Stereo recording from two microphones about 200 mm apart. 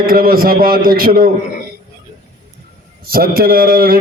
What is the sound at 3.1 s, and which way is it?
Speech, 50° right (ahead or behind).